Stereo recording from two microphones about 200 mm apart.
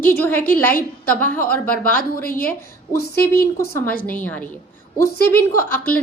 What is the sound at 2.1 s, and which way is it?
Speech, 45° left (ahead or behind).